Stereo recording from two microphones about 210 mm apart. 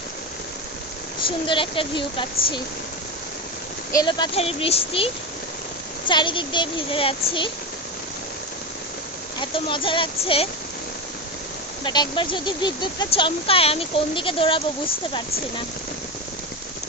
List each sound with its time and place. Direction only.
1.5 s speech: 25° left (ahead or behind)
3.9 s speech: 20° left (ahead or behind)
9.4 s speech: 25° left (ahead or behind)
11.8 s speech: 20° left (ahead or behind)